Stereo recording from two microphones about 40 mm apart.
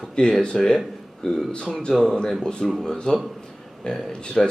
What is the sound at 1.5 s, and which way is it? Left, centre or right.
Speech, centre.